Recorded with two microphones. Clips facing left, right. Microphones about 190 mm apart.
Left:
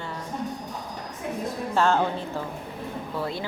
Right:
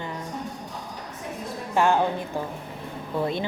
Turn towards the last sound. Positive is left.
turn(degrees=-20)  # may be behind; listen again after turning